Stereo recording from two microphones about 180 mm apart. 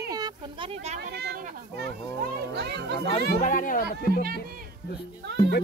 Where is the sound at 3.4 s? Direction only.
45° left (ahead or behind).